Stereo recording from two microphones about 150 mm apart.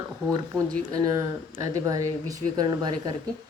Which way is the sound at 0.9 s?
25° right (ahead or behind).